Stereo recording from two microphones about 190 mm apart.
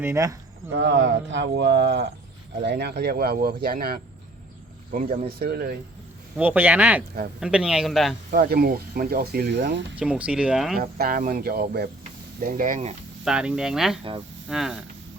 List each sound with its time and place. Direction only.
0.0 s speech: 15° right (ahead or behind)
0.7 s speech: 65° right (ahead or behind)
6.3 s speech: 10° right (ahead or behind)
8.3 s speech: 50° right (ahead or behind)
9.9 s speech: 5° right (ahead or behind)
10.8 s speech: 55° right (ahead or behind)
13.2 s speech: 5° right (ahead or behind)